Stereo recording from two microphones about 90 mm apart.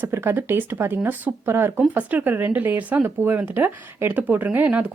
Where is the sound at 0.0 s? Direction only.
25° right (ahead or behind).